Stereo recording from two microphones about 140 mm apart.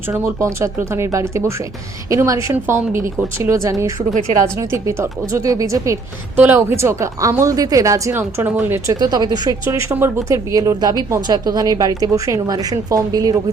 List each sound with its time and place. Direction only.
0.1 s a woman's voice: 20° right (ahead or behind)
9.6 s a woman's voice: 15° right (ahead or behind)